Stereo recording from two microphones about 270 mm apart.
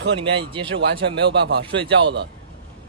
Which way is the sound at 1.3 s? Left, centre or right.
Right.